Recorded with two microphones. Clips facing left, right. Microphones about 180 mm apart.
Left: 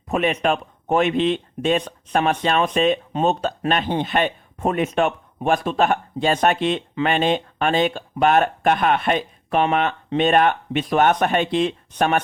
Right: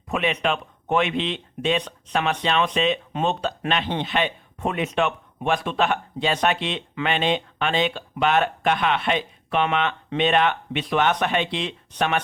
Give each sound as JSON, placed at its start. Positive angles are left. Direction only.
{"t": 0.1, "sound": "speech", "side_deg": 45}